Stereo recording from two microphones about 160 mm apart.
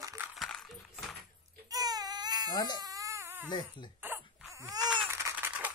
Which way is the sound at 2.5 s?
25° left (ahead or behind).